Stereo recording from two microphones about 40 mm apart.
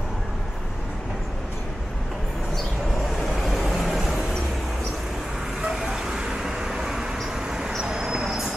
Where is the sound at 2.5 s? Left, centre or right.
Centre.